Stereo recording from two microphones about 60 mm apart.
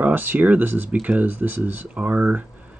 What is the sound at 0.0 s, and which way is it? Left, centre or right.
Speech, right.